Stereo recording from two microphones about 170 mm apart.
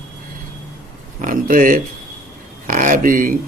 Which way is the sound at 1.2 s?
55° right (ahead or behind).